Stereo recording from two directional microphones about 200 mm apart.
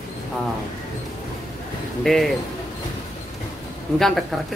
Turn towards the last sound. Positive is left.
turn(degrees=0)  # may be behind; listen again after turning